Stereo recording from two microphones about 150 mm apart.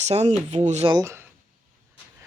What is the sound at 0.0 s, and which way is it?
Speech, 45° right (ahead or behind).